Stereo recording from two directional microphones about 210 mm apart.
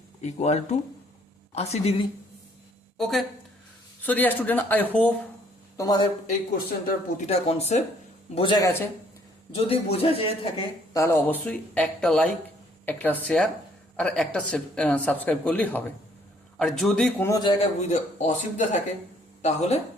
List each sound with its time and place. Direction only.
0.2 s a man's voice: 30° left (ahead or behind)
3.0 s speech: centre (ahead or behind); by 6.1 s 20° left (ahead or behind)
6.5 s speech: 45° left (ahead or behind)
7.3 s speech: 30° left (ahead or behind)
8.4 s a man's voice: 20° left (ahead or behind)
10.9 s speech: 10° left (ahead or behind)
17.6 s speech: 30° left (ahead or behind)